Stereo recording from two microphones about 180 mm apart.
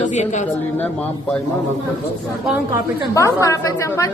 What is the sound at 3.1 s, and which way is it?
A woman's voice, 15° left (ahead or behind).